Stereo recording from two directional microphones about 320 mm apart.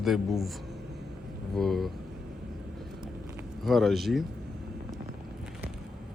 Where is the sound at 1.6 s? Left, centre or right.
Centre.